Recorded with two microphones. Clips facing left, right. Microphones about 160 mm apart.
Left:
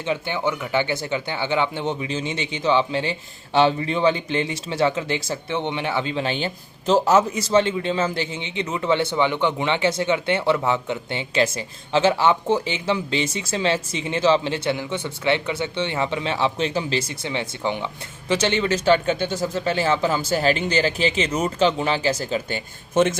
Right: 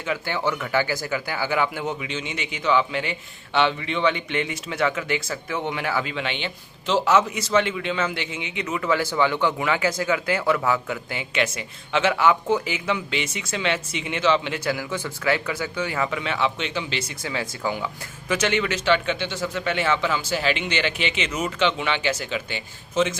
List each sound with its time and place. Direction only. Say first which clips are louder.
0.0 s speech: left 2 dB; 20° left (ahead or behind)
17.2 s speech: left 2 dB; 25° left (ahead or behind); by 23.1 s 50° left (ahead or behind)